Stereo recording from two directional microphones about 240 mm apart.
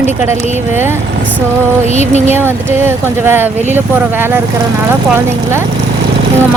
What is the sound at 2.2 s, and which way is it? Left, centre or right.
Speech, centre.